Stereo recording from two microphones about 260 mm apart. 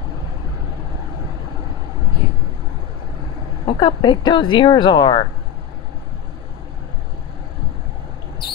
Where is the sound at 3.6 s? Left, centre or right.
Centre.